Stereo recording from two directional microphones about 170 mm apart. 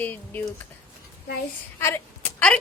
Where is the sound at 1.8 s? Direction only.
10° left (ahead or behind).